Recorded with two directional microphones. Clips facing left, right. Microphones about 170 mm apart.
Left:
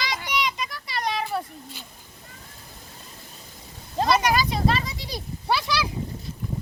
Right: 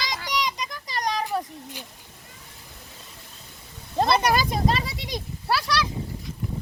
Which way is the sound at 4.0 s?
40° right (ahead or behind).